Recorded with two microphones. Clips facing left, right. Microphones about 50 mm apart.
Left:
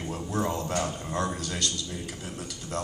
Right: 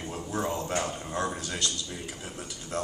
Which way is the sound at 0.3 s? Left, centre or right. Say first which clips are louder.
Left 1 dB; centre.